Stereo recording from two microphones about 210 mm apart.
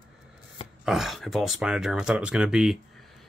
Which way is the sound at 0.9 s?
Centre (ahead or behind).